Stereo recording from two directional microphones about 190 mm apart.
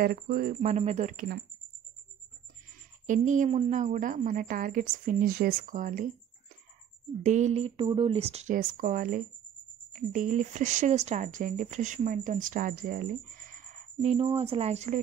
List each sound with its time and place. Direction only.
0.0 s speech: 50° right (ahead or behind)
3.1 s speech: 40° right (ahead or behind)
7.2 s speech: 35° right (ahead or behind)
14.1 s speech: 30° right (ahead or behind)